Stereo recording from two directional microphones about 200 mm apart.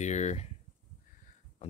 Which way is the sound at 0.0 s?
35° left (ahead or behind).